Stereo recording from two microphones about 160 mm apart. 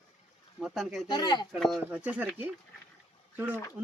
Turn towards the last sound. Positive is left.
turn(degrees=-10)  # may be behind; listen again after turning